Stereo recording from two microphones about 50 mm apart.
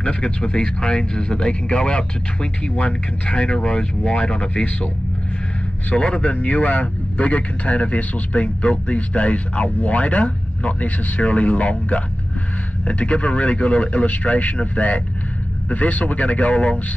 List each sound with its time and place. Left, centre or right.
0.0 s speech: left
5.9 s speech: left